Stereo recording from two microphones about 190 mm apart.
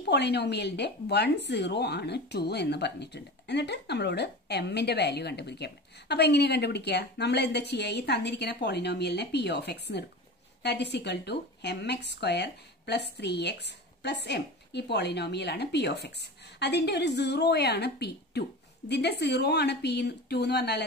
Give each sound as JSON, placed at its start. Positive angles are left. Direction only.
{"t": 0.1, "sound": "a woman's voice", "side_deg": 60}